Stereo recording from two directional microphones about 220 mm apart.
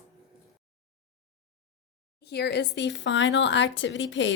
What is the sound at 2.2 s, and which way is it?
Speech, 50° left (ahead or behind).